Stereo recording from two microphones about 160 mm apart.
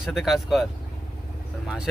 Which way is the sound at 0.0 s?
Centre (ahead or behind).